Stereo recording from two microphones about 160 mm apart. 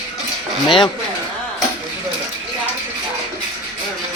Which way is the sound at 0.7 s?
30° left (ahead or behind).